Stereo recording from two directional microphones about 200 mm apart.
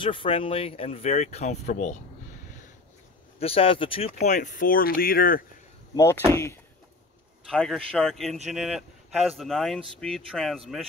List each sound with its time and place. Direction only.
0.0 s speech: 25° left (ahead or behind)
3.3 s speech: 30° left (ahead or behind); by 5.4 s 45° left (ahead or behind)
6.3 s speech: 15° left (ahead or behind)
7.4 s speech: 5° left (ahead or behind)